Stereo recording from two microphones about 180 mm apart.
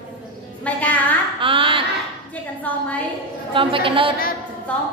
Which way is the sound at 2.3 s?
10° left (ahead or behind).